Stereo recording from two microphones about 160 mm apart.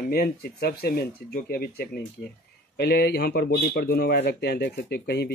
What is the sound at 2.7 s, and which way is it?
A man's voice, 90° left.